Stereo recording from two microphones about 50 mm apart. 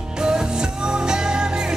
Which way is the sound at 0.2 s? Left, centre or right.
Centre.